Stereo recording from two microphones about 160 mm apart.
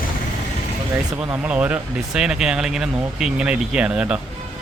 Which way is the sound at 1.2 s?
10° right (ahead or behind).